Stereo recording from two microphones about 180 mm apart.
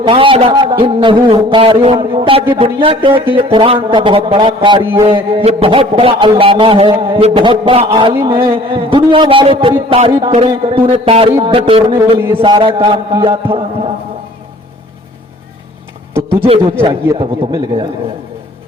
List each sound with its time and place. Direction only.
0.0 s a man's voice: 30° right (ahead or behind)
4.8 s a man's voice: 10° right (ahead or behind)
5.0 s a man's voice: 30° right (ahead or behind)
11.0 s music: 30° right (ahead or behind)
12.4 s a man's voice: 30° right (ahead or behind)
16.8 s a man's voice: 25° right (ahead or behind)